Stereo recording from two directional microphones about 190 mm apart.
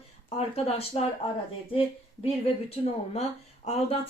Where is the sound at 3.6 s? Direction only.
35° left (ahead or behind).